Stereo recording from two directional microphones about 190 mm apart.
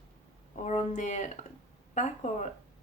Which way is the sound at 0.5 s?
40° left (ahead or behind).